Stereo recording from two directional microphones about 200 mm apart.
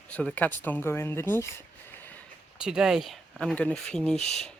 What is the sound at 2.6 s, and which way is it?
Speech, 5° right (ahead or behind).